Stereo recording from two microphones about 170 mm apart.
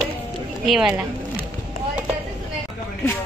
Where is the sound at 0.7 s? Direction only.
5° right (ahead or behind).